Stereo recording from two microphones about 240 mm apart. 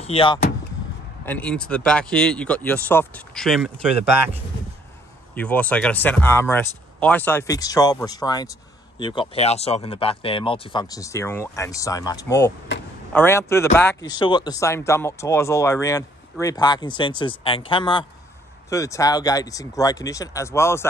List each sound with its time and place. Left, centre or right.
0.0 s speech: left
1.2 s speech: centre
5.3 s speech: centre